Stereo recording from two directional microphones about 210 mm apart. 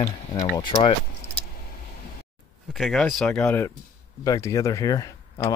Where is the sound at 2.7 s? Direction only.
Centre (ahead or behind).